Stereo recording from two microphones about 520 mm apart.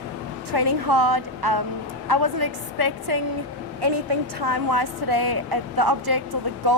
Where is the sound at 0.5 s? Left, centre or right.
Right.